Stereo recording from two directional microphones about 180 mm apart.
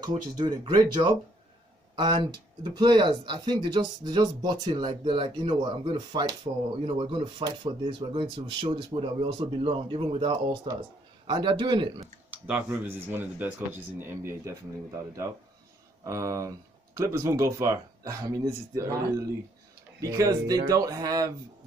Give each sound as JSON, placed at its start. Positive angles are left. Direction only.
{"t": 0.0, "sound": "speech", "side_deg": -25}
{"t": 12.3, "sound": "speech", "side_deg": -10}
{"t": 16.0, "sound": "speech", "side_deg": -15}